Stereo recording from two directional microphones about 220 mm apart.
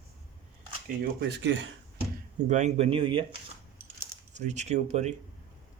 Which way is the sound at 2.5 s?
30° right (ahead or behind).